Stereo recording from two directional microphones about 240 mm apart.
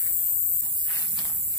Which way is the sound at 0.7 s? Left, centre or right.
Centre.